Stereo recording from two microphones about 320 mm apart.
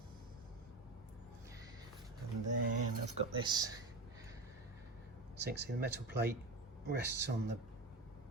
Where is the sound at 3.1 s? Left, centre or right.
Centre.